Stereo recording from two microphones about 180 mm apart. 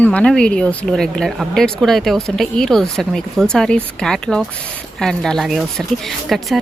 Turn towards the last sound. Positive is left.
turn(degrees=0)  # may be behind; listen again after turning